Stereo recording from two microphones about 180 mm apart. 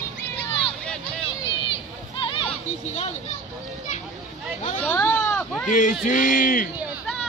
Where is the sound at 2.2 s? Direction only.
30° left (ahead or behind).